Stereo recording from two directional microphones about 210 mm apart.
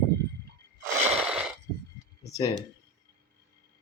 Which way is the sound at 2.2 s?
20° left (ahead or behind).